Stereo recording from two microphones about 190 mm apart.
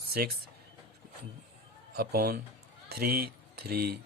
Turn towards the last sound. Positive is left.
turn(degrees=-55)  # may be behind; listen again after turning